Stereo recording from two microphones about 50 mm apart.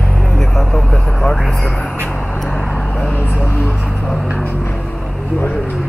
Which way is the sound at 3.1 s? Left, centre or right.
Left.